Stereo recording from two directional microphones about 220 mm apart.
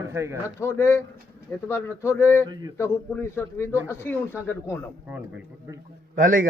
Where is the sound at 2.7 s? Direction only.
10° left (ahead or behind).